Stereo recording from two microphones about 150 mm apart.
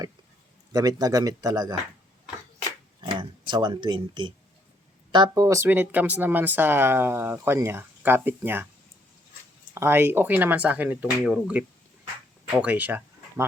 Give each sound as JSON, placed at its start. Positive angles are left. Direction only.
{"t": 0.7, "sound": "speech", "side_deg": -25}
{"t": 3.0, "sound": "speech", "side_deg": -30}
{"t": 9.7, "sound": "speech", "side_deg": -15}